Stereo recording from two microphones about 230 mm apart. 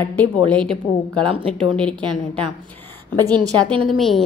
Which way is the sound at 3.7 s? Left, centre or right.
Right.